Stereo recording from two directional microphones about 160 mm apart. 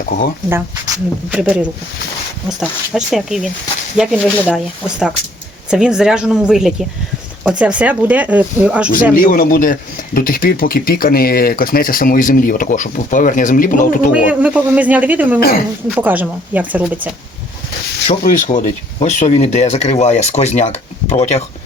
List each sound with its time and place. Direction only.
1.3 s speech: 5° right (ahead or behind)
9.1 s speech: 60° left (ahead or behind)
14.3 s speech: 10° right (ahead or behind)
15.4 s speech: 70° left (ahead or behind)
16.0 s speech: 10° right (ahead or behind)
18.2 s speech: 50° left (ahead or behind)